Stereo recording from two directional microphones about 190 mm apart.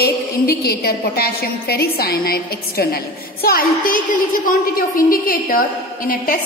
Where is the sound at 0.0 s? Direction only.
55° left (ahead or behind).